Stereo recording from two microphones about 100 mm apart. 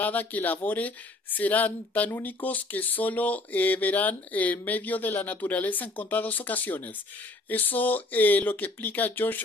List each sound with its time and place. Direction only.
0.0 s speech: 15° left (ahead or behind)